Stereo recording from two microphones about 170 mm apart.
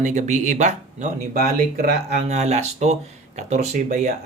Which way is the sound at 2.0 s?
40° right (ahead or behind).